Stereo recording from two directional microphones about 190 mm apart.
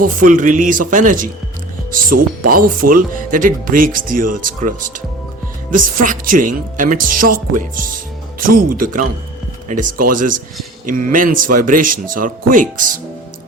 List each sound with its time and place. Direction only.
0.0 s speech: 45° right (ahead or behind)
8.4 s speech: 45° right (ahead or behind)